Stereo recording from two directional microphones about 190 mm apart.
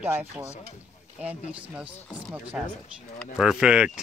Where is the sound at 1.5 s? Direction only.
5° right (ahead or behind).